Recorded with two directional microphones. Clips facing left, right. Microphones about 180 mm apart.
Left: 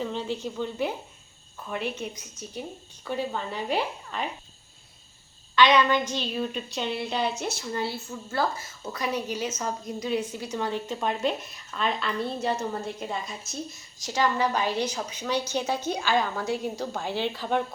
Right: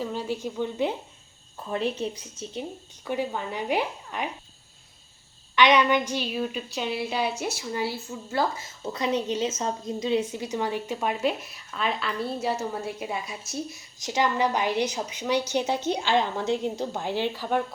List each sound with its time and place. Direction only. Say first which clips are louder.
0.0 s a woman's voice: right 1 dB; 10° right (ahead or behind)
1.7 s a woman's voice: right 4 dB; 30° right (ahead or behind); by 4.3 s 15° right (ahead or behind)
5.5 s a woman's voice: even; 15° right (ahead or behind)